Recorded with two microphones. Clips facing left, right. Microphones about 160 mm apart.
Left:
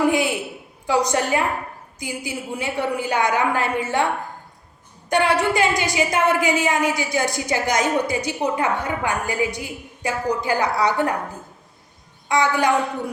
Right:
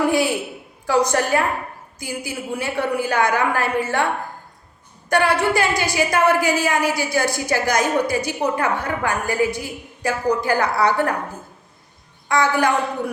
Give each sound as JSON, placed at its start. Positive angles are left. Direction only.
{"t": 0.9, "sound": "a woman's voice", "side_deg": 20}
{"t": 12.3, "sound": "a woman's voice", "side_deg": 20}